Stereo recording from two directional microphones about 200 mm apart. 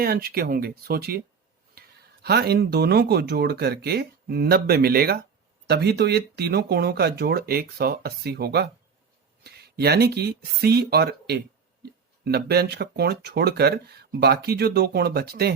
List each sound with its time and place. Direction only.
0.0 s speech: 50° right (ahead or behind)
2.2 s speech: 55° right (ahead or behind)